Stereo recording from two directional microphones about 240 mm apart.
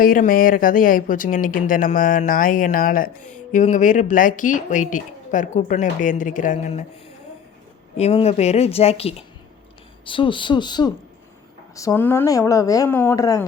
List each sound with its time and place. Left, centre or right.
0.0 s speech: left
7.9 s speech: left